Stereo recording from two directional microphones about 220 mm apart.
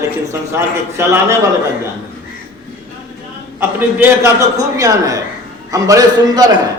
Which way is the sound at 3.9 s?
10° right (ahead or behind).